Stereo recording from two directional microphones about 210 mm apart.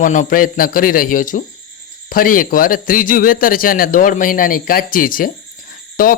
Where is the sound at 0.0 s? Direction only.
40° left (ahead or behind).